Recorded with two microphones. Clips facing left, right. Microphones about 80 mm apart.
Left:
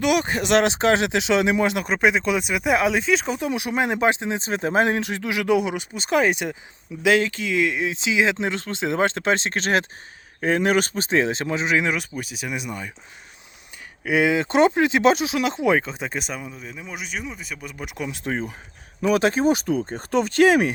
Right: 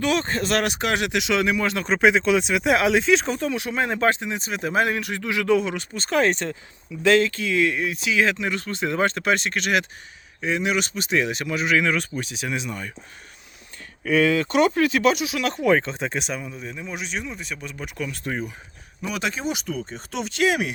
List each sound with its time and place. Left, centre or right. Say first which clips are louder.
0.0 s speech: left 2 dB; centre
1.9 s speech: right 6 dB; centre; by 9.8 s left
10.4 s speech: left 4 dB; left
11.9 s speech: right 2 dB; centre
14.0 s speech: even; centre
15.4 s speech: right 1 dB; centre
15.8 s speech: right 1 dB; centre
18.3 s speech: left 2 dB; left